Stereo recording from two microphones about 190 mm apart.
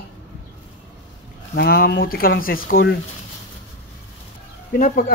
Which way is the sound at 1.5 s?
55° left (ahead or behind).